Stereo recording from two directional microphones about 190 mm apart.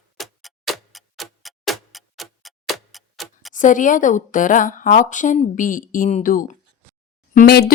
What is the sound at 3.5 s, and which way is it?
Speech, 45° left (ahead or behind).